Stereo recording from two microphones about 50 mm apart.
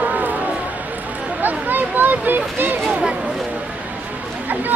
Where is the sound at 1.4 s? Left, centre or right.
Right.